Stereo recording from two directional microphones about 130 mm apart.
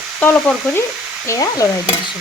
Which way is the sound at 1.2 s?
25° left (ahead or behind).